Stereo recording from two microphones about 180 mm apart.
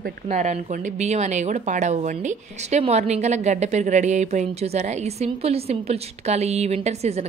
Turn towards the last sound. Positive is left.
turn(degrees=-35)  # may be behind; listen again after turning